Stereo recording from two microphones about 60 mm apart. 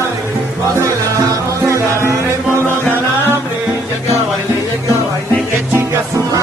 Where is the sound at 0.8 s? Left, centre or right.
Right.